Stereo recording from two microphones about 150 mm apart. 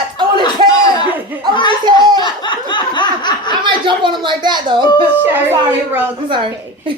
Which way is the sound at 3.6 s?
35° right (ahead or behind).